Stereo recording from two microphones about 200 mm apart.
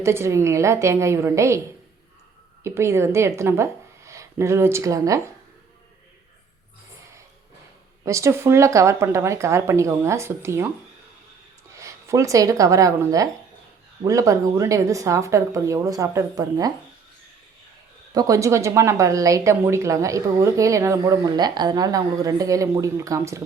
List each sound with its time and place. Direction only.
0.0 s speech: 15° right (ahead or behind)
2.6 s speech: 15° right (ahead or behind)
8.0 s speech: 15° right (ahead or behind)
11.8 s speech: 15° right (ahead or behind)
18.1 s speech: 20° right (ahead or behind)